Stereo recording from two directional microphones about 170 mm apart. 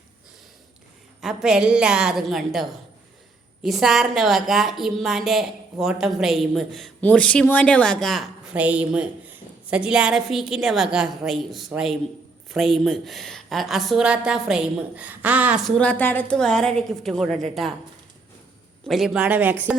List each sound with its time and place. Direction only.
1.2 s a woman's voice: centre (ahead or behind)
15.6 s a woman's voice: 10° left (ahead or behind)
18.9 s speech: centre (ahead or behind)